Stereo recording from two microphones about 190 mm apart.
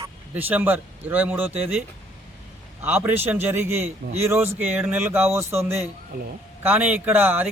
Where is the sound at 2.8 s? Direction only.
10° right (ahead or behind).